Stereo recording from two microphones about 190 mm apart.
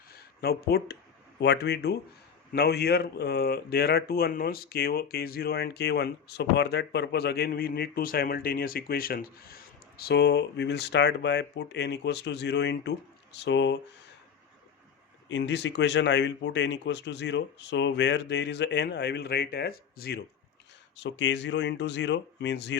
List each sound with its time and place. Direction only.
0.1 s speech: 55° left (ahead or behind)
10.0 s speech: 60° left (ahead or behind)
15.3 s speech: 65° left (ahead or behind)
20.9 s speech: 70° left (ahead or behind)